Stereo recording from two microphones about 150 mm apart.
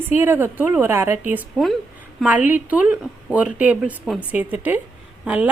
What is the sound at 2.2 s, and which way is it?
A woman's voice, 10° right (ahead or behind).